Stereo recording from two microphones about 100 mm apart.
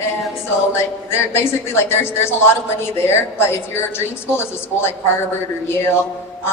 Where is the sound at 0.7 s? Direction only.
25° left (ahead or behind).